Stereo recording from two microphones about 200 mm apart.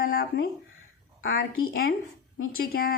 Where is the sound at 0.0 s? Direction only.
45° left (ahead or behind).